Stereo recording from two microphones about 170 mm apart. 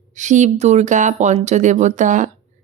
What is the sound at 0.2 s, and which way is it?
Speech, 45° right (ahead or behind).